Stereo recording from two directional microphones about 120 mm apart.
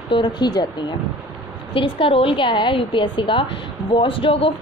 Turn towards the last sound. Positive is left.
turn(degrees=50)  # may be behind; listen again after turning